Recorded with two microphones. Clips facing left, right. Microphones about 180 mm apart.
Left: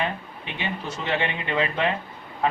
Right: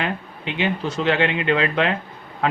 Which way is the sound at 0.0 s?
90° right.